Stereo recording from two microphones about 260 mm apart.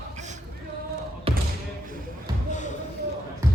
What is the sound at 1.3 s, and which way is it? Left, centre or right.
Basketball bounce, right.